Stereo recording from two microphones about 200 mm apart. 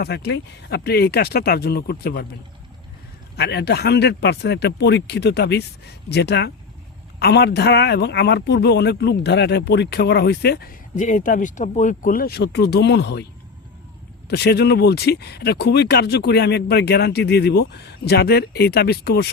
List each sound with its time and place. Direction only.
0.0 s speech: 55° left (ahead or behind)
3.3 s speech: 55° left (ahead or behind)
14.3 s speech: 55° left (ahead or behind)